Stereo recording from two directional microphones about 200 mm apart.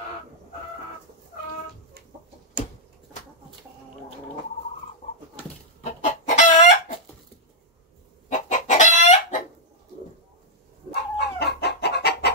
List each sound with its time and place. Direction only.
5.9 s chicken: 40° left (ahead or behind)
8.3 s chicken: 40° left (ahead or behind)
10.9 s chicken: 55° left (ahead or behind)